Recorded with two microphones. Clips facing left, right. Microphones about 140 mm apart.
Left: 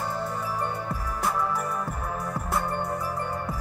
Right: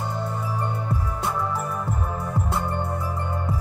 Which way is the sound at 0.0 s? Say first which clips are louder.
Right 1 dB; 20° right (ahead or behind).